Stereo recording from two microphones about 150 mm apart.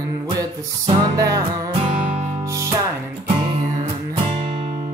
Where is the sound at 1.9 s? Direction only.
55° right (ahead or behind).